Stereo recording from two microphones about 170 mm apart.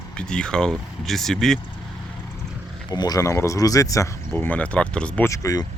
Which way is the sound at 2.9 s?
25° left (ahead or behind).